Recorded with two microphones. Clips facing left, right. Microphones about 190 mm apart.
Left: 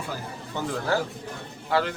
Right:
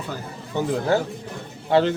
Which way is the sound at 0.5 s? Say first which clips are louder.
Right 5 dB; 20° right (ahead or behind).